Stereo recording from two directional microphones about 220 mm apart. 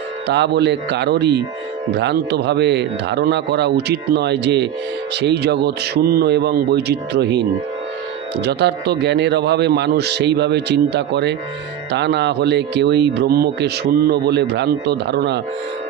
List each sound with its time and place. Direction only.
0.3 s speech: 50° right (ahead or behind)